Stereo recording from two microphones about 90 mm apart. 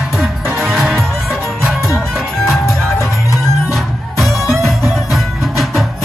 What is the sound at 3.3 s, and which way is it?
Music, 40° left (ahead or behind).